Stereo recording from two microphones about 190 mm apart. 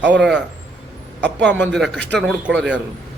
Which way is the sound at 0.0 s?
5° right (ahead or behind).